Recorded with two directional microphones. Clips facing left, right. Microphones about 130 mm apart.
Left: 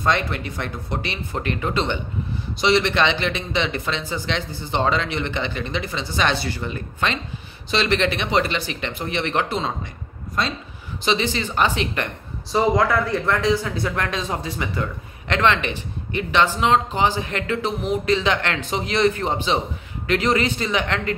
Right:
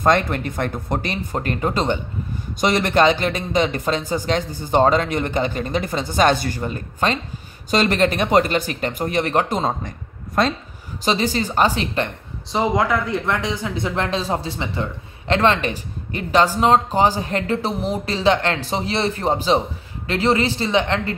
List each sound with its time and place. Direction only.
0.0 s speech: 45° right (ahead or behind)
12.5 s speech: 20° right (ahead or behind)